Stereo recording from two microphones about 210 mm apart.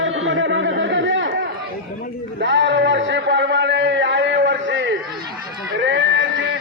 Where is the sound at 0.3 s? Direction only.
60° right (ahead or behind).